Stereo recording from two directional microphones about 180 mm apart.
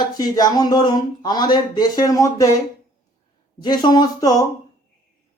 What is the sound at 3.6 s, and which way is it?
Speech, 25° left (ahead or behind).